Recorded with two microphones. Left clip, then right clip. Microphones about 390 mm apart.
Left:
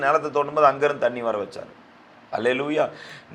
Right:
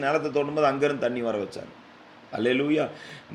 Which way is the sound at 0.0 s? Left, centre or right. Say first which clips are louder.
Left 4 dB; left.